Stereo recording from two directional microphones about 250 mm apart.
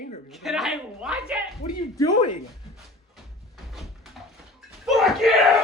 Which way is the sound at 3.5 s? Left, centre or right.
Centre.